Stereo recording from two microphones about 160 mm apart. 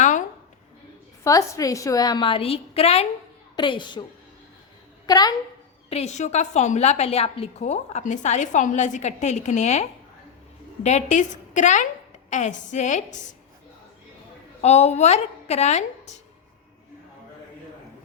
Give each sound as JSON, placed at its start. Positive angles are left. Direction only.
{"t": 0.0, "sound": "a sound", "side_deg": 50}
{"t": 1.2, "sound": "a woman's voice", "side_deg": 20}
{"t": 3.5, "sound": "a woman's voice", "side_deg": 30}
{"t": 5.0, "sound": "a woman's voice", "side_deg": 25}
{"t": 5.9, "sound": "a woman's voice", "side_deg": 45}
{"t": 10.8, "sound": "a woman's voice", "side_deg": 50}
{"t": 14.6, "sound": "a woman's voice", "side_deg": 45}